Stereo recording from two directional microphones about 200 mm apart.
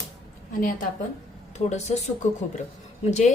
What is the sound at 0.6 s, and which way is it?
A woman's voice, 45° left (ahead or behind).